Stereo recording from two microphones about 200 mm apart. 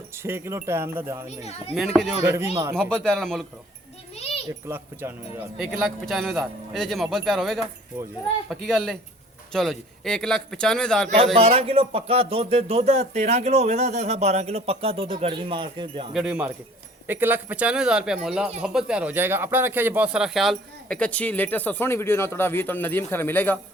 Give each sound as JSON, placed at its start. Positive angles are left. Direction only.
{"t": 0.2, "sound": "speech", "side_deg": -10}
{"t": 1.7, "sound": "speech", "side_deg": 0}
{"t": 2.2, "sound": "speech", "side_deg": -15}
{"t": 2.9, "sound": "speech", "side_deg": 5}
{"t": 4.1, "sound": "a sound", "side_deg": 30}
{"t": 4.7, "sound": "speech", "side_deg": -10}
{"t": 6.1, "sound": "speech", "side_deg": 0}
{"t": 11.3, "sound": "speech", "side_deg": -30}
{"t": 16.1, "sound": "speech", "side_deg": -5}